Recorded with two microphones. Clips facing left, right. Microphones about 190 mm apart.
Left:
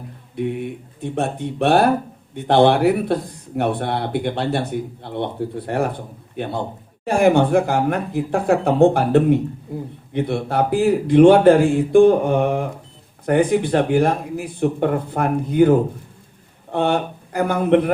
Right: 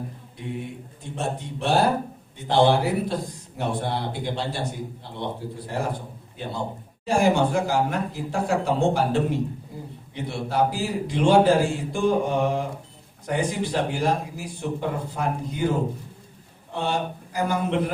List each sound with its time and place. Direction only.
0.3 s a man's voice: 60° left (ahead or behind)
9.7 s a sound: 60° left (ahead or behind)
10.1 s speech: 60° left (ahead or behind)